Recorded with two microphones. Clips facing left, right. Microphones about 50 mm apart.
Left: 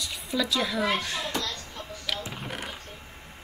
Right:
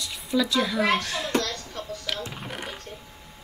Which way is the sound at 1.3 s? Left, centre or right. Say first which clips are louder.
Right 6 dB; right.